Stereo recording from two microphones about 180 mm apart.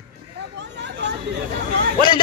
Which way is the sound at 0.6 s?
75° right (ahead or behind).